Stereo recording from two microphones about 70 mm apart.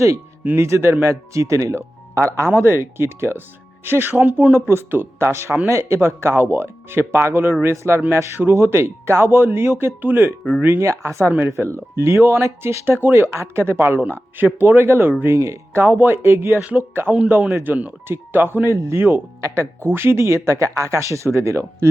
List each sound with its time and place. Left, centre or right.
0.4 s speech: right
11.3 s speech: right
15.9 s speech: right
16.1 s speech: right
17.1 s speech: right
18.7 s speech: right
19.4 s speech: right